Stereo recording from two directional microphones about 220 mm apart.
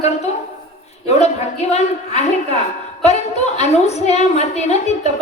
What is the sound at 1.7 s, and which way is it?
A woman's voice, 30° left (ahead or behind).